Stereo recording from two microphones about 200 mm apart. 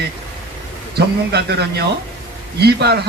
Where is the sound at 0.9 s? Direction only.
55° right (ahead or behind).